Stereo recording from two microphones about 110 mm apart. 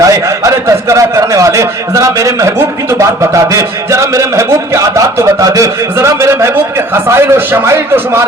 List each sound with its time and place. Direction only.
0.0 s a man's voice: 30° right (ahead or behind)